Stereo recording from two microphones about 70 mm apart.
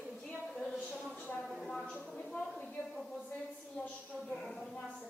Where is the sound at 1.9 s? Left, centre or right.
Centre.